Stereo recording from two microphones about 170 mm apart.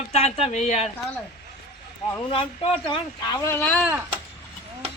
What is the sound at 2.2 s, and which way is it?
Speech, 30° left (ahead or behind).